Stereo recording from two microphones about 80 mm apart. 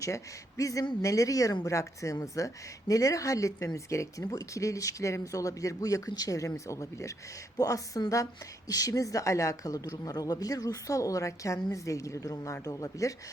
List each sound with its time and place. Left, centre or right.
0.0 s speech: left